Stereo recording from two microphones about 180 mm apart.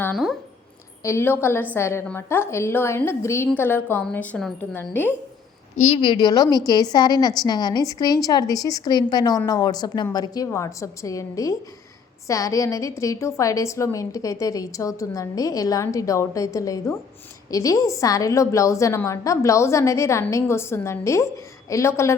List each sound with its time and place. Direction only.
0.0 s speech: centre (ahead or behind)
1.0 s a woman's voice: 15° left (ahead or behind)
5.7 s a woman's voice: 40° left (ahead or behind)
6.0 s a woman's voice: 25° left (ahead or behind)